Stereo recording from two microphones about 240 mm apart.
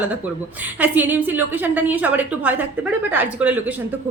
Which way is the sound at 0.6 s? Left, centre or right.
Centre.